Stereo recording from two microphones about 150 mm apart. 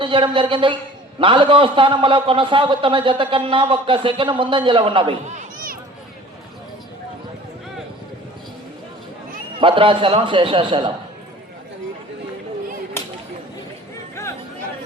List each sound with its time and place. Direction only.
0.0 s a man's voice: 35° right (ahead or behind)
5.3 s a sound: 60° right (ahead or behind)
9.6 s a man's voice: 35° right (ahead or behind)